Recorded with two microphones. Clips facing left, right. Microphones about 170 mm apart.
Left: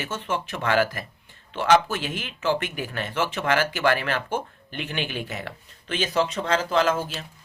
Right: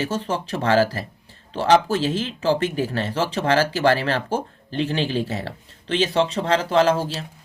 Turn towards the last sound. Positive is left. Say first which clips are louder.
# right 4 dB
turn(degrees=-35)  # may be behind; listen again after turning